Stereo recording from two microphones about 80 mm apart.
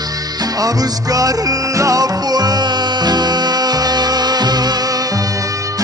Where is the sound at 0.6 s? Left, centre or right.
Right.